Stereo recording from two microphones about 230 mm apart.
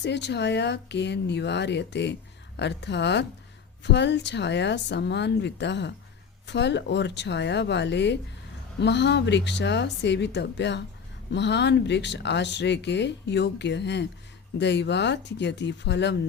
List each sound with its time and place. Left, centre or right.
0.0 s speech: left